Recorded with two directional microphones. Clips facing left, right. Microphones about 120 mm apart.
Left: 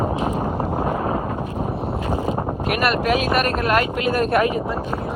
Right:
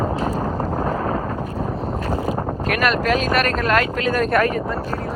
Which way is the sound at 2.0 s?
20° left (ahead or behind).